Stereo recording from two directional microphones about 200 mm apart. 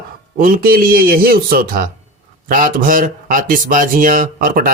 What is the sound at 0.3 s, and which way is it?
Speech, 45° right (ahead or behind).